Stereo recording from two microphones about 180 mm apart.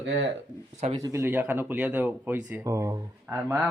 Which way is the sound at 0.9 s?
15° right (ahead or behind).